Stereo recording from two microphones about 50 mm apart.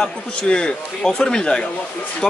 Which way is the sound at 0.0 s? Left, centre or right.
Centre.